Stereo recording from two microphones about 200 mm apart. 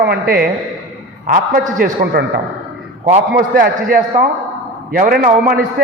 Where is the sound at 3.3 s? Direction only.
55° right (ahead or behind).